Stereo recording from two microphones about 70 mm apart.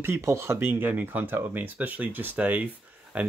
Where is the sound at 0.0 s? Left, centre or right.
Right.